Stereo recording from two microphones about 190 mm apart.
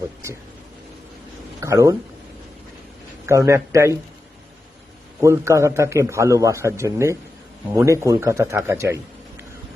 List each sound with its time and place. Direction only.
1.6 s a man's voice: 15° right (ahead or behind)
3.2 s a man's voice: 15° right (ahead or behind)
5.2 s a man's voice: 15° right (ahead or behind)